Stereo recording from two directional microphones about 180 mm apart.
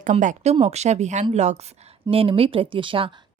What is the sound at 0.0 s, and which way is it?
A woman's voice, 45° right (ahead or behind).